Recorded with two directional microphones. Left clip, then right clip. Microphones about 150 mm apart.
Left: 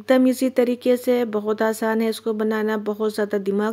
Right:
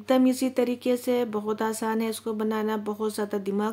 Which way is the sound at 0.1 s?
30° left (ahead or behind).